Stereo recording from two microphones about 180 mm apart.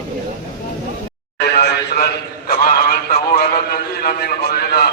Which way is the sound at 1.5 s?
65° left (ahead or behind).